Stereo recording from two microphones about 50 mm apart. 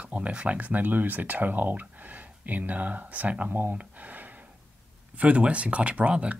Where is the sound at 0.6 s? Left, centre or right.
Right.